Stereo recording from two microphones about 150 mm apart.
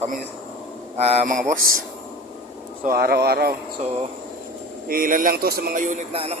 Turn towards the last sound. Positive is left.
turn(degrees=-40)  # may be behind; listen again after turning